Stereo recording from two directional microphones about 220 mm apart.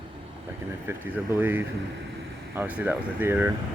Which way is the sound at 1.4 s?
10° right (ahead or behind).